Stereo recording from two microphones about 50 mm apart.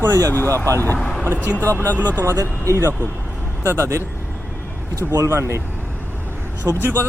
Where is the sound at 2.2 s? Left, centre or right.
Right.